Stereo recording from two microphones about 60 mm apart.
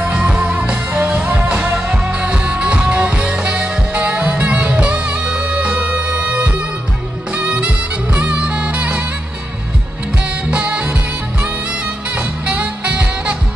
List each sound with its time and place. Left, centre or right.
0.0 s music: centre
10.5 s music: centre
12.2 s music: right